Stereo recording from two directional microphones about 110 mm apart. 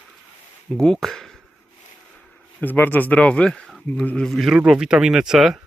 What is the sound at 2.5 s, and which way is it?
Speech, 20° left (ahead or behind).